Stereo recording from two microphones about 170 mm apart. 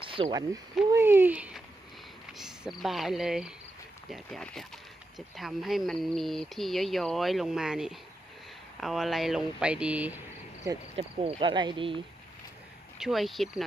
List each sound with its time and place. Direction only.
0.0 s speech: 30° right (ahead or behind)
0.9 s speech: 15° right (ahead or behind)
10.9 s speech: 35° right (ahead or behind)
13.0 s speech: centre (ahead or behind)